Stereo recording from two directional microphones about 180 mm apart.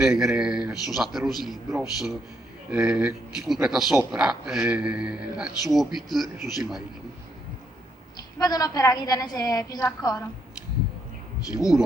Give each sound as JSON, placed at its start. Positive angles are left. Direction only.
{"t": 0.0, "sound": "speech", "side_deg": 0}
{"t": 8.4, "sound": "a woman's voice", "side_deg": 20}
{"t": 11.5, "sound": "speech", "side_deg": 0}